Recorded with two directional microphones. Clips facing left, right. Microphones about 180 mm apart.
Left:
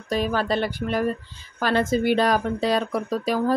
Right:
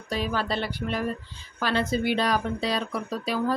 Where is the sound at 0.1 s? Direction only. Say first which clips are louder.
Left 5 dB; 50° left (ahead or behind).